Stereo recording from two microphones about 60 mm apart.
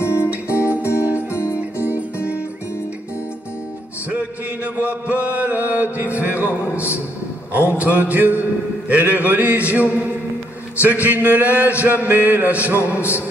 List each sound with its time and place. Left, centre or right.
0.0 s music: left
4.8 s mantra: right
6.6 s a man's voice: left
7.5 s a sound: right
8.8 s a man's voice: right
9.3 s a sound: right